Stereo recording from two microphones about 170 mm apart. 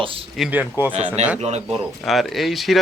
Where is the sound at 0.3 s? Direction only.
Centre (ahead or behind).